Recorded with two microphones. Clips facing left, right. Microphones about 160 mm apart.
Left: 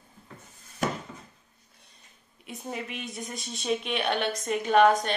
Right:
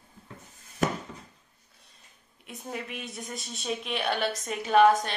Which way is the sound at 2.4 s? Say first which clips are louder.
Left 1 dB; centre (ahead or behind).